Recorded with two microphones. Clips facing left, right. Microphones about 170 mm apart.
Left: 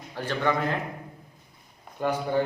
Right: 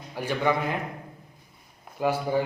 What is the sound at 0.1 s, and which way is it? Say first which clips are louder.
Speech: right 1 dB; 10° right (ahead or behind).